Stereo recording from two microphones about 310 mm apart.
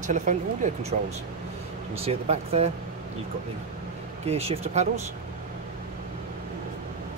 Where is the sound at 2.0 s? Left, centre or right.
Centre.